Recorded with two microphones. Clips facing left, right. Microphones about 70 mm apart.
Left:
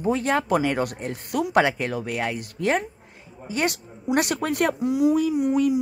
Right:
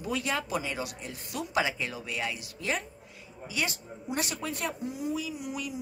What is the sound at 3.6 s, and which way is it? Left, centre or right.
Speech, left.